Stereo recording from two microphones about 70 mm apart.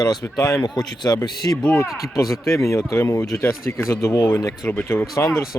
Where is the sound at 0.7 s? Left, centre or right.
Left.